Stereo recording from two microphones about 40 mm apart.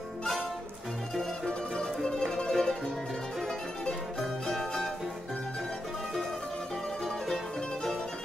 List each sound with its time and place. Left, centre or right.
1.4 s music: centre
4.2 s music: centre